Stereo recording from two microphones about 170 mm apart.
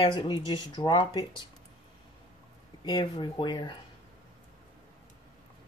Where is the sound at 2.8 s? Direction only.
25° left (ahead or behind).